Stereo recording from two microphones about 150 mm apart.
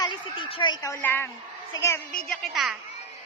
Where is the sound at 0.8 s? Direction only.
15° left (ahead or behind).